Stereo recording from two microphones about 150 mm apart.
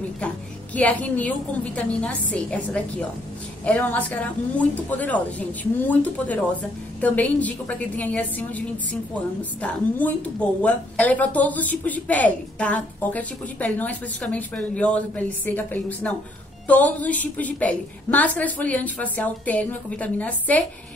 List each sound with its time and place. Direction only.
0.7 s a woman's voice: 10° left (ahead or behind)